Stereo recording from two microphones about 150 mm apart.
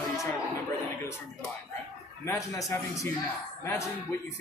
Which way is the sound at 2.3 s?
20° left (ahead or behind).